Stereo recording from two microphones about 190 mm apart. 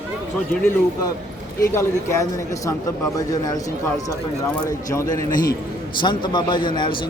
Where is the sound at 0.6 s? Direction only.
10° left (ahead or behind).